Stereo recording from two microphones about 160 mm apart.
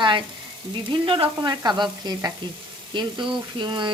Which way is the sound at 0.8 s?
30° right (ahead or behind).